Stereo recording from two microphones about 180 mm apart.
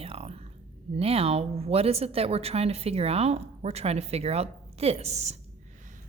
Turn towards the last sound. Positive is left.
turn(degrees=-40)  # may be behind; listen again after turning